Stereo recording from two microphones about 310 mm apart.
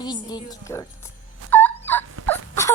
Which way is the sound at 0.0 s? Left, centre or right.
Centre.